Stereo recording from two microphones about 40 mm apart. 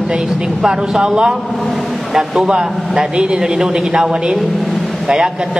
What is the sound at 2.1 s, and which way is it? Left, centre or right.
A man's voice, centre.